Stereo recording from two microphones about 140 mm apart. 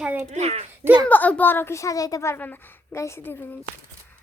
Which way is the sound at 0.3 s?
50° right (ahead or behind).